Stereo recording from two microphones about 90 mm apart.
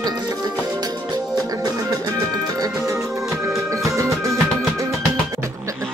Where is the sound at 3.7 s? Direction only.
35° right (ahead or behind).